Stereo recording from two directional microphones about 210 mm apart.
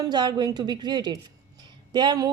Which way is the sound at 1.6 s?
20° right (ahead or behind).